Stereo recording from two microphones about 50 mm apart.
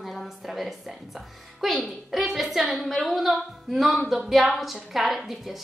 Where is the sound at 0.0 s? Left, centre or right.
Centre.